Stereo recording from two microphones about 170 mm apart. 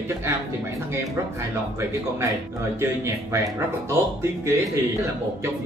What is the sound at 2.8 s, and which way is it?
Speech, 15° right (ahead or behind).